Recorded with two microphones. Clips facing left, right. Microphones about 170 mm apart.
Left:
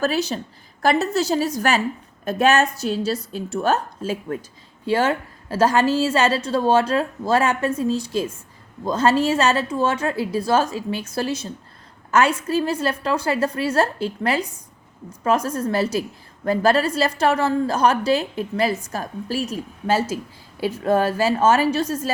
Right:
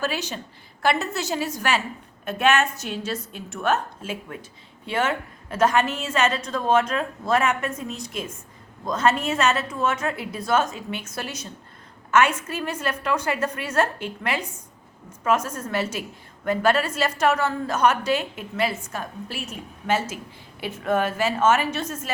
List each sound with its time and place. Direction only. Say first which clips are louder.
0.0 s a woman's voice: left 6 dB; 40° left (ahead or behind)